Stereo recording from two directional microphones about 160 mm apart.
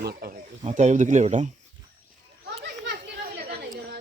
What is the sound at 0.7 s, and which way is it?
Speech, 50° right (ahead or behind).